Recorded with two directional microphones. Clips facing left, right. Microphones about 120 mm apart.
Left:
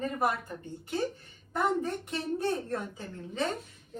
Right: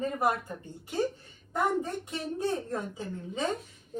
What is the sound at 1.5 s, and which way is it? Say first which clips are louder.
Speech: even; 15° right (ahead or behind).